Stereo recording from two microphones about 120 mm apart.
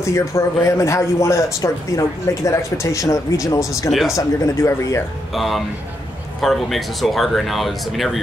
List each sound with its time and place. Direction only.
0.0 s a man's voice: 25° left (ahead or behind)
5.3 s speech: centre (ahead or behind)